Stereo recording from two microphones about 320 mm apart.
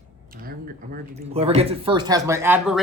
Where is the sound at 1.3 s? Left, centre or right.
Centre.